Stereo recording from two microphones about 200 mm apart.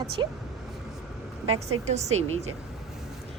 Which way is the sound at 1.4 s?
90° right.